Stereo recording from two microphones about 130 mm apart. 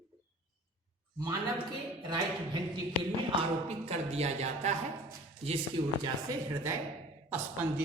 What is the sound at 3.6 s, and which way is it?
Speech, 55° right (ahead or behind).